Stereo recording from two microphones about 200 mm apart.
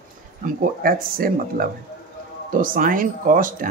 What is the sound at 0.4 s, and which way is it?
Speech, 45° right (ahead or behind).